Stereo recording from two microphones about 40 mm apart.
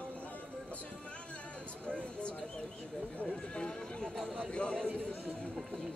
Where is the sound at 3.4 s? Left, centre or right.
Left.